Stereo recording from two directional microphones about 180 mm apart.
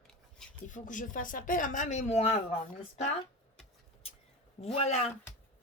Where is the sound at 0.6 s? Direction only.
45° left (ahead or behind).